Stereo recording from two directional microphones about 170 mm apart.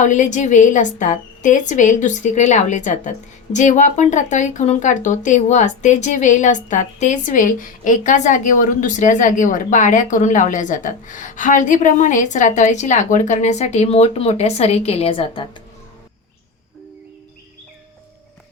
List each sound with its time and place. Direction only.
0.0 s a woman's voice: 45° left (ahead or behind)